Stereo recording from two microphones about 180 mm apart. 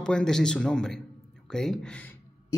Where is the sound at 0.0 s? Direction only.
5° left (ahead or behind).